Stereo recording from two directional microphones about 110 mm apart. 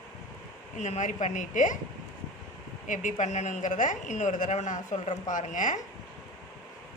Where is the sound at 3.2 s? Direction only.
90° left.